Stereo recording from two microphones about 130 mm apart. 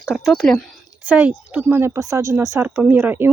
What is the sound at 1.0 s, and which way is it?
Speech, 10° right (ahead or behind).